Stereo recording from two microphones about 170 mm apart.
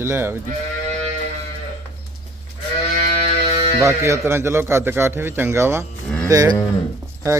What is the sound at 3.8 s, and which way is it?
A man's voice, 15° right (ahead or behind).